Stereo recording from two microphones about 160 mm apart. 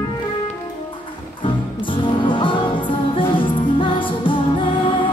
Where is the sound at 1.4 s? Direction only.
30° left (ahead or behind).